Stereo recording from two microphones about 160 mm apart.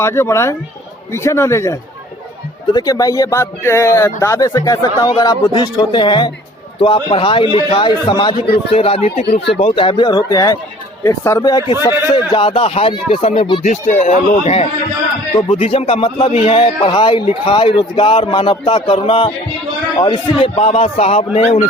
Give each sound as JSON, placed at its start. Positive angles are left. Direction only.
{"t": 0.0, "sound": "a man's voice", "side_deg": 15}
{"t": 13.7, "sound": "speech", "side_deg": 50}